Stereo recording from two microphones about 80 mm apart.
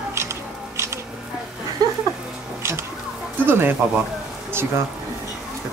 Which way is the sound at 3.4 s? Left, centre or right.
Right.